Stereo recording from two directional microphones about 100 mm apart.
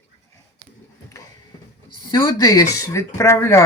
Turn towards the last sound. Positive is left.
turn(degrees=30)  # may be behind; listen again after turning